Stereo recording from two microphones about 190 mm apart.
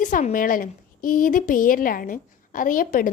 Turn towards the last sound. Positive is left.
turn(degrees=45)  # may be behind; listen again after turning